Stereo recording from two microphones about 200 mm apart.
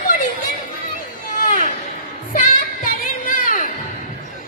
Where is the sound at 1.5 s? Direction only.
40° left (ahead or behind).